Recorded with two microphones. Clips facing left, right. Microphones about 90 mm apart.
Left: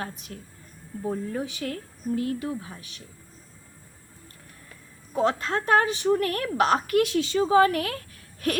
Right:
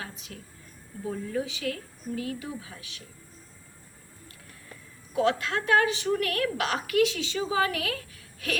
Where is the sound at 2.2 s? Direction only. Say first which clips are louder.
Left 6 dB; 45° left (ahead or behind).